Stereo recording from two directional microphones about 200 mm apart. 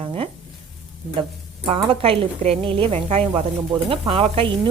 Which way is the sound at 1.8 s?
30° right (ahead or behind).